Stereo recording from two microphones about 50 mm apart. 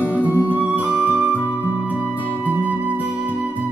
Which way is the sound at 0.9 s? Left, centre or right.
Left.